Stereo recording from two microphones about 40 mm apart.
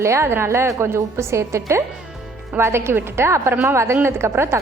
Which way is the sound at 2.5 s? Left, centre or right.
Right.